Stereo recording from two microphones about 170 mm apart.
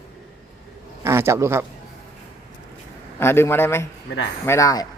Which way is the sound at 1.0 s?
15° right (ahead or behind).